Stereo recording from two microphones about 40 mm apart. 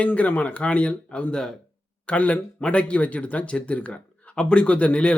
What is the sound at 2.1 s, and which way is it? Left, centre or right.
Speech, left.